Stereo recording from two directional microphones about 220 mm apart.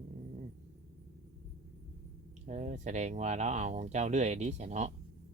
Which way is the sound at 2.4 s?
35° right (ahead or behind).